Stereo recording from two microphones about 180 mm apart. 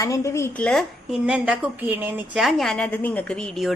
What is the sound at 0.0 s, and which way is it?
A woman's voice, 15° left (ahead or behind).